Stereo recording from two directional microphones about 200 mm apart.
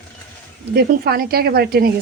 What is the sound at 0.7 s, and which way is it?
Speech, 50° right (ahead or behind).